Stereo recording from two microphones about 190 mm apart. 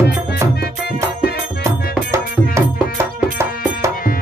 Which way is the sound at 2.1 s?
15° right (ahead or behind).